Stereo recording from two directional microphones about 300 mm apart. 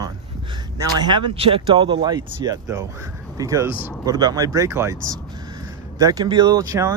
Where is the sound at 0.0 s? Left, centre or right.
Centre.